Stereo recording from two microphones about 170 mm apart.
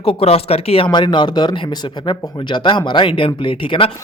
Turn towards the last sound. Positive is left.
turn(degrees=30)  # may be behind; listen again after turning